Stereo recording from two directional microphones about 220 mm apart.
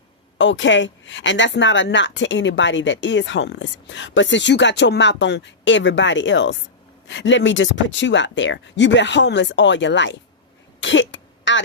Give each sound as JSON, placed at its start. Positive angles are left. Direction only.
{"t": 0.3, "sound": "speech", "side_deg": 55}
{"t": 10.8, "sound": "throat clearing", "side_deg": 55}